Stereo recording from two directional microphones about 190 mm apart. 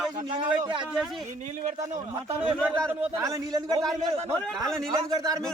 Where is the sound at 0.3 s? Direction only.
25° right (ahead or behind).